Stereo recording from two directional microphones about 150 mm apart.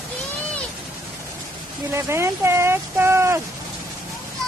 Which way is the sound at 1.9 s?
15° right (ahead or behind).